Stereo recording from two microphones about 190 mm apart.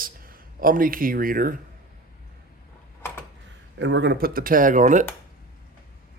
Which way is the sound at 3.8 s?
70° right (ahead or behind).